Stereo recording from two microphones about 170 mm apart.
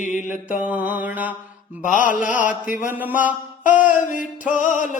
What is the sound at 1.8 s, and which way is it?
Music, 50° left (ahead or behind).